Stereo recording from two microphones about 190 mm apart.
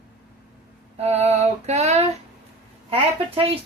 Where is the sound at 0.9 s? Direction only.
35° right (ahead or behind).